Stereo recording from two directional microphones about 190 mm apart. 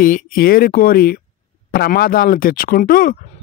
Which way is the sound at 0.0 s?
45° left (ahead or behind).